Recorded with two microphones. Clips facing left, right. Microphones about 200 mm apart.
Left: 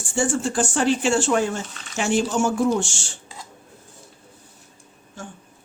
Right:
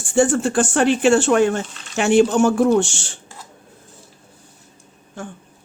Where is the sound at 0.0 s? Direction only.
60° right (ahead or behind).